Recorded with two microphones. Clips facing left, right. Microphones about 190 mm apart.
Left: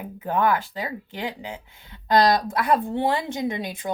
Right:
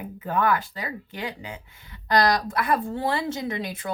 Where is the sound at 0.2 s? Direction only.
20° left (ahead or behind).